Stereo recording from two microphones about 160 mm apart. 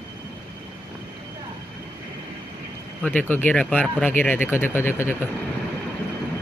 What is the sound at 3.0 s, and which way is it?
Speech, 10° left (ahead or behind).